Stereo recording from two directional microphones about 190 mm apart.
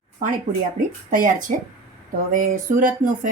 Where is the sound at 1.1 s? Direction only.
45° right (ahead or behind).